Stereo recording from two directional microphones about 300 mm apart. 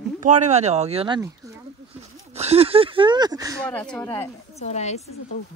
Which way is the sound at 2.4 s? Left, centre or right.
Centre.